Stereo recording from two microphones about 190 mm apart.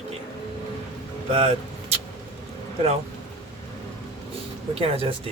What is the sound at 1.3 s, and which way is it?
Speech, 30° right (ahead or behind).